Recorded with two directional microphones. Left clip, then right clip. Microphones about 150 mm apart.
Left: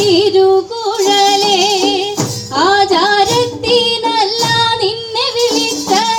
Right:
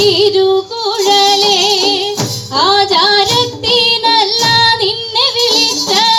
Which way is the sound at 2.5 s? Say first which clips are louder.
Right 1 dB; 40° left (ahead or behind).